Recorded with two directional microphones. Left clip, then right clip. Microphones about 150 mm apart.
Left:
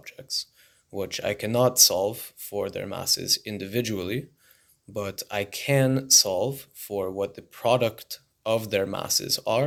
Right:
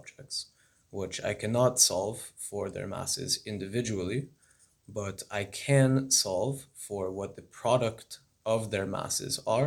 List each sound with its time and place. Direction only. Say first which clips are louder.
0.0 s speech: left 7 dB; 30° left (ahead or behind)